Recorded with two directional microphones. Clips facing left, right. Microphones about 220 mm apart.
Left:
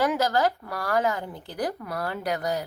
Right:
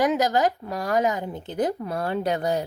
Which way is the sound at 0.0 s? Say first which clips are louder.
Right 2 dB; 20° right (ahead or behind).